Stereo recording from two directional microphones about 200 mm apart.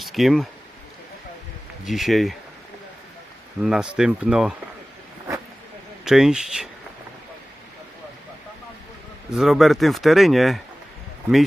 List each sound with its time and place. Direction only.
0.0 s speech: centre (ahead or behind)
1.8 s speech: centre (ahead or behind)
3.6 s speech: 5° right (ahead or behind)
6.1 s speech: 5° right (ahead or behind)
9.3 s speech: centre (ahead or behind)